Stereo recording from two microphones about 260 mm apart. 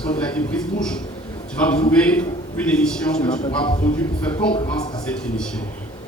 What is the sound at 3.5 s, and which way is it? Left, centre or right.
Speech, centre.